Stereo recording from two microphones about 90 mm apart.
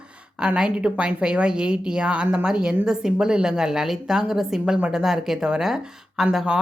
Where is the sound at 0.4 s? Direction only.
10° right (ahead or behind).